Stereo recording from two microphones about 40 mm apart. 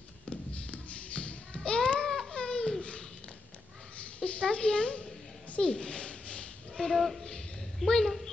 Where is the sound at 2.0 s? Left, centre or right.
Centre.